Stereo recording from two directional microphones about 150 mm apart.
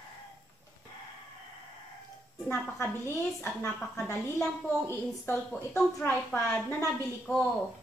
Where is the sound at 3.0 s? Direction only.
15° left (ahead or behind).